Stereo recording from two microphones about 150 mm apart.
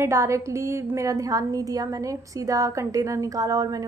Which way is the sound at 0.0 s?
20° right (ahead or behind).